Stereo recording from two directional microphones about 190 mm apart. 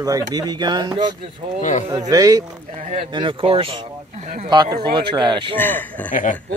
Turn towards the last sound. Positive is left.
turn(degrees=40)  # may be behind; listen again after turning